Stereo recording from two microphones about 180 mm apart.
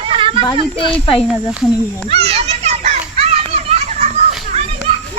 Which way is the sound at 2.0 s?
35° right (ahead or behind).